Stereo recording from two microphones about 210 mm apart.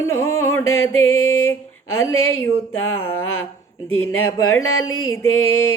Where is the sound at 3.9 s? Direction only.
85° left.